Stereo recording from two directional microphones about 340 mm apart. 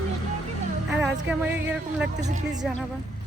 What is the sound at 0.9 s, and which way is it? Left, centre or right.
Speech, centre.